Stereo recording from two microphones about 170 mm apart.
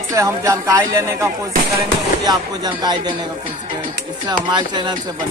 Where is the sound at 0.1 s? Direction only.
20° right (ahead or behind).